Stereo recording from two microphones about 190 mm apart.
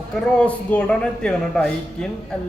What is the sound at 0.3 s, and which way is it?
Speech, 5° left (ahead or behind).